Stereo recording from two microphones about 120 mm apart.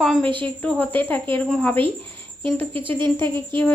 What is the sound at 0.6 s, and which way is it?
Speech, 15° left (ahead or behind).